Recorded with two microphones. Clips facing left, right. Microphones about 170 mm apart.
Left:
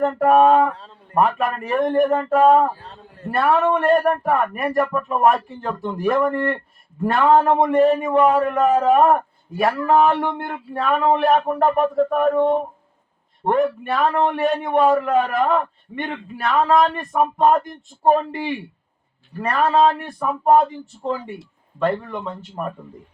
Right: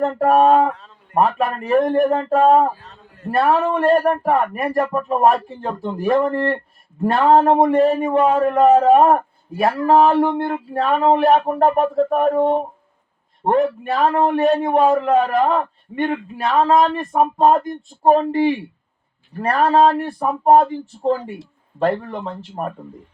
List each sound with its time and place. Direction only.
0.2 s a man's voice: 35° right (ahead or behind)